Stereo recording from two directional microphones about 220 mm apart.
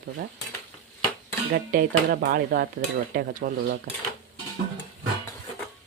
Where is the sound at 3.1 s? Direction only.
40° right (ahead or behind).